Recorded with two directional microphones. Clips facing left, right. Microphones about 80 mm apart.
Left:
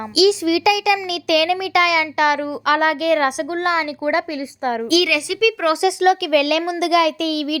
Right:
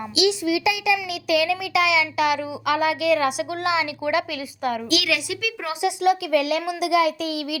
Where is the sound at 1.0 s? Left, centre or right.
Left.